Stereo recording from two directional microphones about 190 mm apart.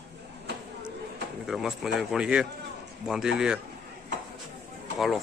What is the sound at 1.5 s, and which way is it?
Speech, centre (ahead or behind).